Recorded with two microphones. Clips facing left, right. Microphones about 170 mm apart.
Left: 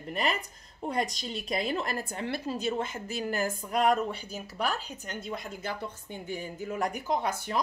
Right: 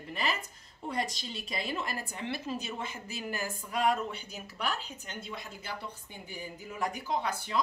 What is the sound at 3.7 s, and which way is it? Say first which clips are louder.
Speech: left 4 dB; 35° left (ahead or behind).